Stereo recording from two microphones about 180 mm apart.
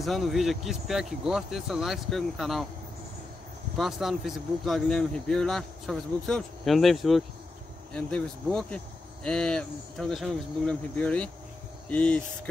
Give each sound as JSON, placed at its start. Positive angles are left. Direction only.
{"t": 0.0, "sound": "speech", "side_deg": 0}
{"t": 3.7, "sound": "speech", "side_deg": 0}